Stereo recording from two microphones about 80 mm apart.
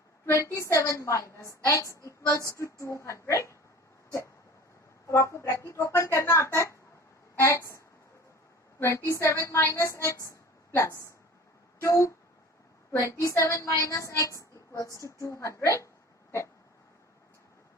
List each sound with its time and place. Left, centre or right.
0.3 s a woman's voice: left
5.0 s a woman's voice: left
9.0 s a woman's voice: left